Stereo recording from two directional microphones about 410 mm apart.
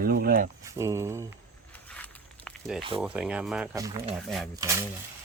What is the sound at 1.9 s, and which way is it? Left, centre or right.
Walk, centre.